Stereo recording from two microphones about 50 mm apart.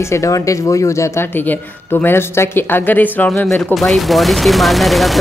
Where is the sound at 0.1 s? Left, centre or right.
Left.